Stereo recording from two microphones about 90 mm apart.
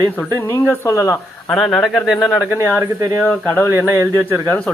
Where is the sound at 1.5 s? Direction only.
10° left (ahead or behind).